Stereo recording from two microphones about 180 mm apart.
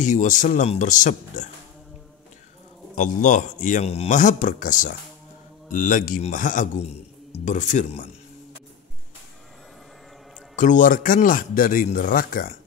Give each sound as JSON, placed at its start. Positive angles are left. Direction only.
{"t": 0.0, "sound": "a man's voice", "side_deg": 45}
{"t": 3.0, "sound": "a man's voice", "side_deg": 45}
{"t": 10.5, "sound": "a man's voice", "side_deg": 45}